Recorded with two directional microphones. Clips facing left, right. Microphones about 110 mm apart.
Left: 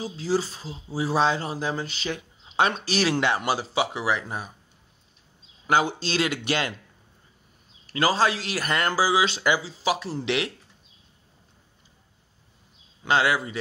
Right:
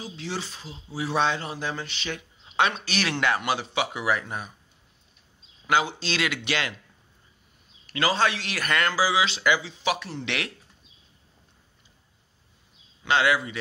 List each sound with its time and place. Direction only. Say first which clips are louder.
0.0 s speech: left 8 dB; 35° left (ahead or behind)
5.7 s speech: left 2 dB; 40° left (ahead or behind)
7.8 s speech: left 2 dB; 35° left (ahead or behind)
8.9 s speech: left 2 dB; 45° left (ahead or behind)
13.0 s speech: even; 35° left (ahead or behind)